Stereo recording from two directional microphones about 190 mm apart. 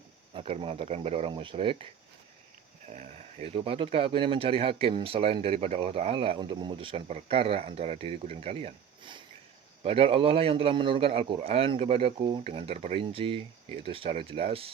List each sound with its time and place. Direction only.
0.3 s speech: 30° right (ahead or behind)
2.8 s speech: 40° right (ahead or behind)